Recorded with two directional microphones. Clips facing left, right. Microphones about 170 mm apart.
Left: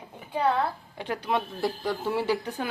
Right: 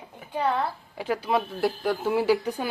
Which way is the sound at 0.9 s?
5° right (ahead or behind).